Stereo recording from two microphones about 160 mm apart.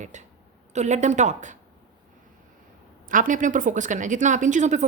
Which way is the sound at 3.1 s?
55° right (ahead or behind).